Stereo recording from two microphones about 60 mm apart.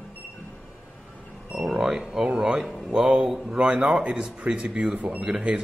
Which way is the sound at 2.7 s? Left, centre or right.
Centre.